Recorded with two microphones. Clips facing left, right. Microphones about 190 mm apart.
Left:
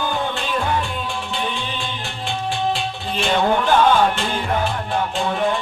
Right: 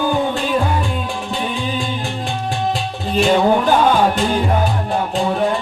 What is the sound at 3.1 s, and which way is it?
Music, 40° right (ahead or behind).